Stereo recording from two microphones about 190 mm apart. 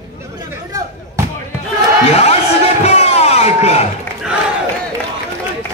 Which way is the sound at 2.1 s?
35° left (ahead or behind).